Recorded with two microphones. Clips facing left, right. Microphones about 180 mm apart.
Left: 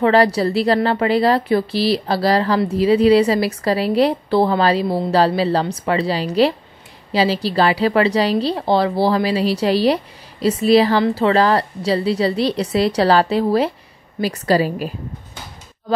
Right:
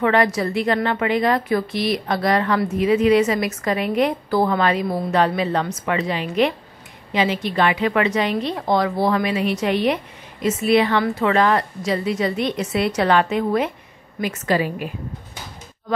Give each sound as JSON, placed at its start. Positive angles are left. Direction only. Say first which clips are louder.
{"t": 0.0, "sound": "a woman's voice", "louder": "left 4 dB", "side_deg": 30}